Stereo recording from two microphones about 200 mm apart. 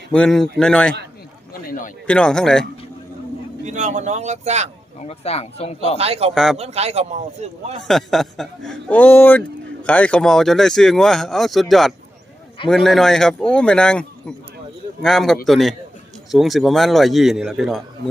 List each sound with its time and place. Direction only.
0.1 s speech: 5° left (ahead or behind)
2.0 s speech: 5° left (ahead or behind)
3.6 s speech: 35° right (ahead or behind)
4.9 s speech: 30° left (ahead or behind)
6.0 s speech: 30° right (ahead or behind)
6.3 s speech: centre (ahead or behind)
6.6 s speech: 30° right (ahead or behind)
7.9 s speech: centre (ahead or behind)